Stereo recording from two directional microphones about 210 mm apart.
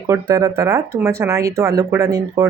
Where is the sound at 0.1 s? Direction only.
15° right (ahead or behind).